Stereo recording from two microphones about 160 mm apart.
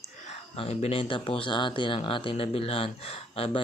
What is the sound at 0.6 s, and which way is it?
Speech, 40° left (ahead or behind).